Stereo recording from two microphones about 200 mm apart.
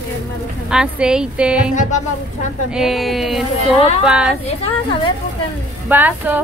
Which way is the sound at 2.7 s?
Centre (ahead or behind).